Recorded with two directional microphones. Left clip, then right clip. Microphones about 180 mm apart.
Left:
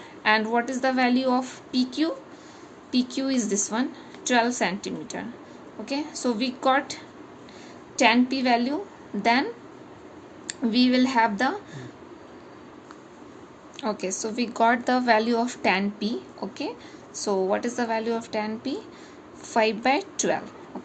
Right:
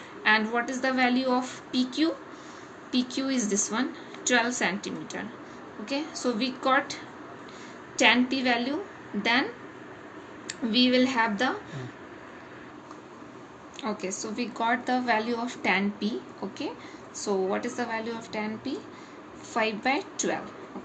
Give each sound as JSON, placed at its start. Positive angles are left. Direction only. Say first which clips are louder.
{"t": 0.2, "sound": "a woman's voice", "louder": "left 2 dB", "side_deg": 45}
{"t": 13.8, "sound": "a woman's voice", "louder": "left 4 dB", "side_deg": 45}